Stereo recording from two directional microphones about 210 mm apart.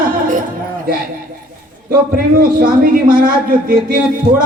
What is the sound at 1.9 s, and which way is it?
A man's voice, 45° right (ahead or behind).